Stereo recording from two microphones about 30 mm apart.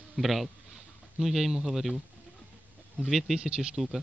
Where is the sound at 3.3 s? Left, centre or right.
Right.